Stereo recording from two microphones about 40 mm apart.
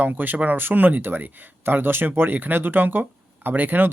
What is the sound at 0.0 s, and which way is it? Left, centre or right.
Speech, right.